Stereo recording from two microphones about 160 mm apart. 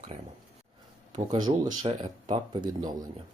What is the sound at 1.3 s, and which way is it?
Speech, 25° right (ahead or behind).